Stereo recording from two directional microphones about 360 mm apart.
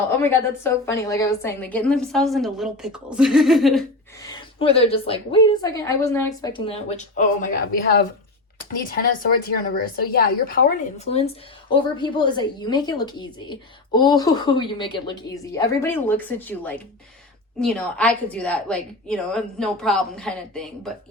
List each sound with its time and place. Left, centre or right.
0.2 s a woman's voice: centre